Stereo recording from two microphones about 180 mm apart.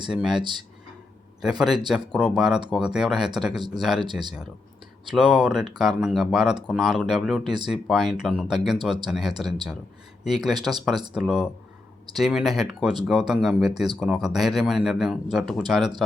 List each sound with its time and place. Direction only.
0.1 s a man's voice: centre (ahead or behind)
4.0 s speech: 25° right (ahead or behind)
5.1 s speech: 5° right (ahead or behind)
10.4 s speech: centre (ahead or behind)